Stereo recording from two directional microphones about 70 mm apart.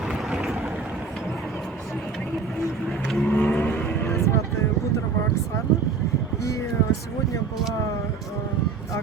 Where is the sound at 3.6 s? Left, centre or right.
Left.